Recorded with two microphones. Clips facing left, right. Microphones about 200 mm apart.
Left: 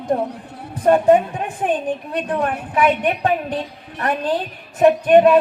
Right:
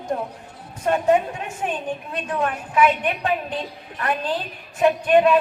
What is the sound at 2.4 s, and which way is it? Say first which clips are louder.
A man's voice: even; 40° left (ahead or behind).